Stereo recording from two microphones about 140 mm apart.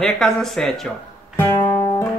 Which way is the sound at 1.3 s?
15° left (ahead or behind).